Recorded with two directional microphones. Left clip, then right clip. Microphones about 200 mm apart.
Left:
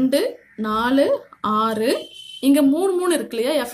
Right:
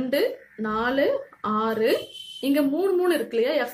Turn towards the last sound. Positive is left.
turn(degrees=40)  # may be behind; listen again after turning